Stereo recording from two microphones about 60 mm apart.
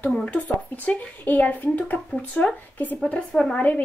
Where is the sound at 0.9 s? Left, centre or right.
Left.